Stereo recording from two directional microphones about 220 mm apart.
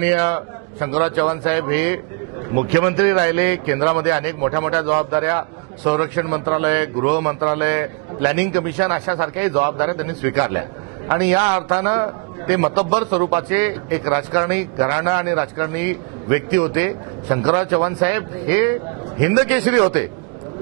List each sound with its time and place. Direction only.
0.0 s a man's voice: 20° right (ahead or behind)